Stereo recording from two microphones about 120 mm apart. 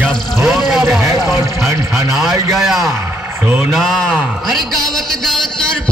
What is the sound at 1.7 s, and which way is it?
Speech, 25° right (ahead or behind).